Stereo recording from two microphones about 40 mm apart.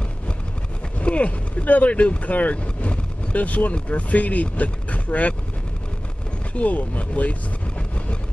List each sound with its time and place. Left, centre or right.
0.9 s speech: left
6.5 s speech: left